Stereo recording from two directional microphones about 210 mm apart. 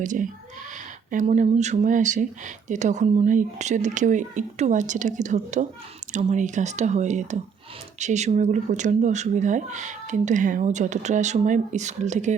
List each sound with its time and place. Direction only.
0.0 s speech: 35° right (ahead or behind)